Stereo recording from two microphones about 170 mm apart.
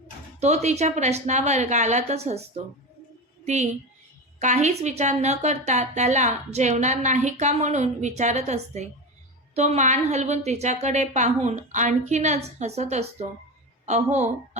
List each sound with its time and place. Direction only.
0.3 s a woman's voice: 40° right (ahead or behind)
3.4 s a woman's voice: 45° right (ahead or behind)